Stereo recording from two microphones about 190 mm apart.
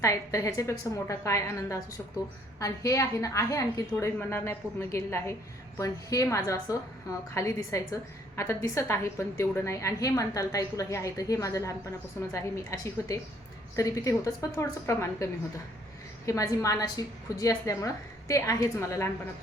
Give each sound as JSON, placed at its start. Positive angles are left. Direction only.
{"t": 0.0, "sound": "a woman's voice", "side_deg": 15}